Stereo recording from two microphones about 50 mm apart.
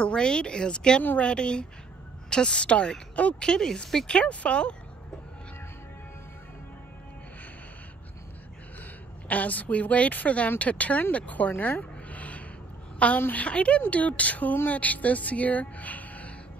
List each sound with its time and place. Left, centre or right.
0.0 s speech: centre
4.2 s speech: left
9.3 s speech: left